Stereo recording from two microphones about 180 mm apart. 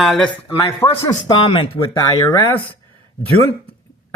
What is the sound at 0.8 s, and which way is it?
Speech, 20° left (ahead or behind).